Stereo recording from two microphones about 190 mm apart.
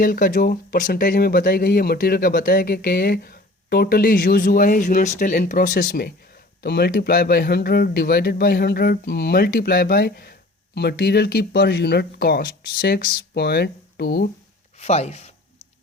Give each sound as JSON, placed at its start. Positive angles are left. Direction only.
{"t": 0.0, "sound": "speech", "side_deg": 45}
{"t": 14.8, "sound": "speech", "side_deg": 35}